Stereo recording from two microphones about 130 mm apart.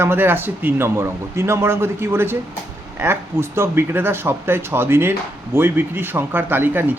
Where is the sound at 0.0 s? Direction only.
15° right (ahead or behind).